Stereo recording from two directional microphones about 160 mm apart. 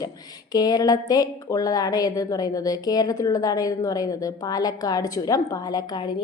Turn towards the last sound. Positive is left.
turn(degrees=25)  # may be behind; listen again after turning